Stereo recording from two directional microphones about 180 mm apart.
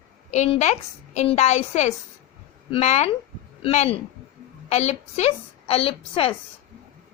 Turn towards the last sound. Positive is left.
turn(degrees=30)  # may be behind; listen again after turning